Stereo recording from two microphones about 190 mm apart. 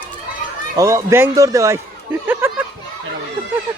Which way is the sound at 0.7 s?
15° right (ahead or behind).